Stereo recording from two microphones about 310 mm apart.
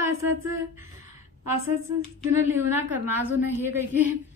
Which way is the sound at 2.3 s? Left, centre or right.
Centre.